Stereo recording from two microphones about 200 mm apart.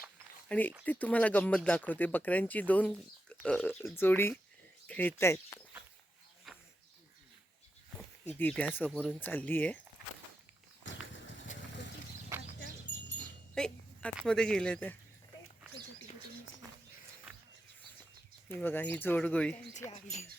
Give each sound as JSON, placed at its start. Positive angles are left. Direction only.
{"t": 0.4, "sound": "speech", "side_deg": 10}
{"t": 8.3, "sound": "speech", "side_deg": 5}
{"t": 10.8, "sound": "horse", "side_deg": 70}
{"t": 13.5, "sound": "a sound", "side_deg": 5}
{"t": 14.2, "sound": "speech", "side_deg": 5}
{"t": 18.4, "sound": "speech", "side_deg": 10}
{"t": 19.9, "sound": "speech", "side_deg": 35}